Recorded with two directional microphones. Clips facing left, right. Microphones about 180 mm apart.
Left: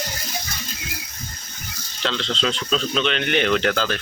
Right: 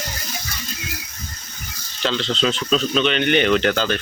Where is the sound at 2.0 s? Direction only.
5° right (ahead or behind).